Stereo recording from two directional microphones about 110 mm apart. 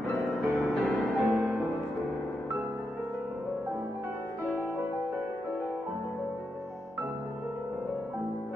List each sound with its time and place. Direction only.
0.1 s music: centre (ahead or behind)
4.5 s music: 20° right (ahead or behind)